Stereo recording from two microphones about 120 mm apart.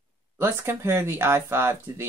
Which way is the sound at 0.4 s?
20° right (ahead or behind).